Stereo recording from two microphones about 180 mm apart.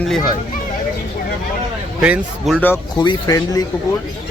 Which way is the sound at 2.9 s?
20° left (ahead or behind).